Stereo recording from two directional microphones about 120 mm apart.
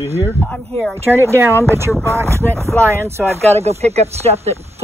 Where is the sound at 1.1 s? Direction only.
20° right (ahead or behind).